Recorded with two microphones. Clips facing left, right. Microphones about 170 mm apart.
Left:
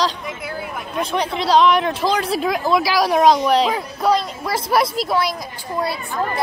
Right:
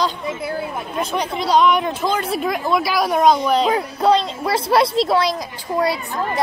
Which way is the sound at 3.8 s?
25° right (ahead or behind).